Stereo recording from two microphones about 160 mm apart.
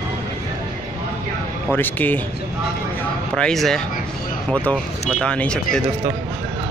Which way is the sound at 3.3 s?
5° left (ahead or behind).